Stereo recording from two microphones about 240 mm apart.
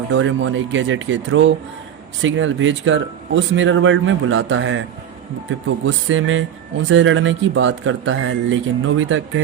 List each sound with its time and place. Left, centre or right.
0.1 s speech: right